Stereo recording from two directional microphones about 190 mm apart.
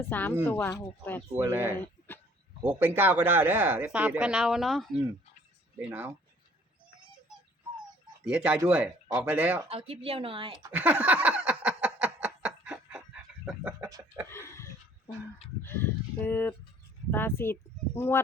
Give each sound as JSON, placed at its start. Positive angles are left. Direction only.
{"t": 0.0, "sound": "a woman's voice", "side_deg": 10}
{"t": 1.3, "sound": "speech", "side_deg": -10}
{"t": 1.7, "sound": "a sound", "side_deg": 10}
{"t": 2.6, "sound": "speech", "side_deg": -10}
{"t": 8.2, "sound": "speech", "side_deg": -5}
{"t": 9.6, "sound": "speech", "side_deg": -30}
{"t": 10.7, "sound": "a sound", "side_deg": -5}
{"t": 13.4, "sound": "speech", "side_deg": -5}
{"t": 14.3, "sound": "a sound", "side_deg": 15}
{"t": 15.6, "sound": "a woman's voice", "side_deg": 10}